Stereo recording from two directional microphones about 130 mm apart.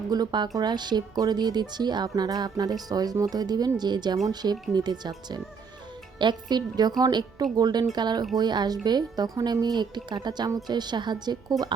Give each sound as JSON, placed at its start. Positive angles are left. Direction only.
{"t": 0.1, "sound": "speech", "side_deg": -35}